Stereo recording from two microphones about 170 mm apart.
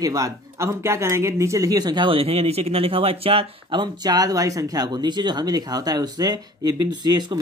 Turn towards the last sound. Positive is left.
turn(degrees=-25)  # may be behind; listen again after turning